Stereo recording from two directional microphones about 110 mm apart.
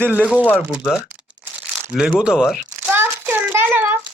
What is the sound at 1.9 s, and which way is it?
Speech, 5° right (ahead or behind).